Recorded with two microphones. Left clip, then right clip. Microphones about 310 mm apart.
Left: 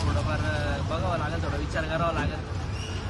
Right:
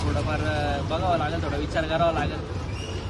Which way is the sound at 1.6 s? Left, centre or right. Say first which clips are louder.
Right 5 dB; centre.